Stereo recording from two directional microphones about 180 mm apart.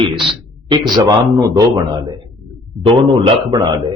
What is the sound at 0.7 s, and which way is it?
A man's voice, 20° right (ahead or behind).